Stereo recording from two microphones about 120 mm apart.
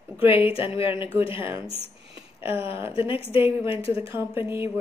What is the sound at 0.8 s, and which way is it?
Speech, 20° right (ahead or behind).